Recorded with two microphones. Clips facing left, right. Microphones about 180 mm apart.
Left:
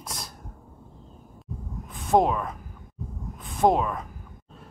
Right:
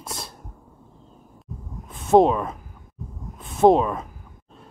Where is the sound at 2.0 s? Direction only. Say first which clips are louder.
Right 5 dB; 25° right (ahead or behind).